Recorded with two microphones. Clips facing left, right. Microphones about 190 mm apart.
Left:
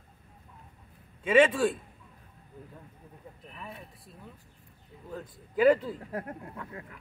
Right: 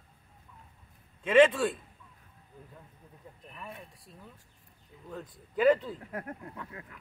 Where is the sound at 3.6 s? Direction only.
Centre (ahead or behind).